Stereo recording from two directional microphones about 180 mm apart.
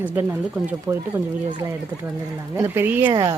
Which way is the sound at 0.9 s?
10° right (ahead or behind).